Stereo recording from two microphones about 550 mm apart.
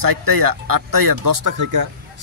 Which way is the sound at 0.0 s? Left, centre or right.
Right.